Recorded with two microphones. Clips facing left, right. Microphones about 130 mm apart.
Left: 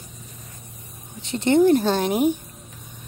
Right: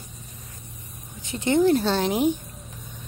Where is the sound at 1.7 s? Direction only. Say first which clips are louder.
Left 2 dB; 45° left (ahead or behind).